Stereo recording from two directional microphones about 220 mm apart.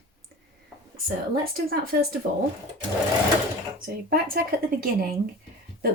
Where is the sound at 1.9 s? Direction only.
40° right (ahead or behind).